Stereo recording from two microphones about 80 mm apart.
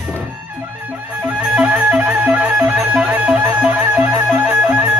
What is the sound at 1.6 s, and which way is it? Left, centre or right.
Music, centre.